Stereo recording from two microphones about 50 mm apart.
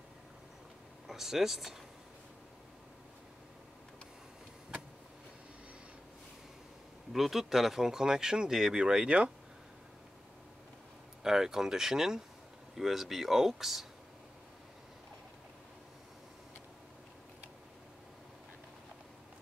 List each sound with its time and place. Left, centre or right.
1.0 s speech: centre
7.1 s speech: centre; by 9.3 s right
11.2 s speech: centre